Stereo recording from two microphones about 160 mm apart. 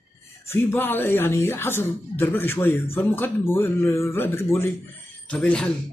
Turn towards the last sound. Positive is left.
turn(degrees=5)  # may be behind; listen again after turning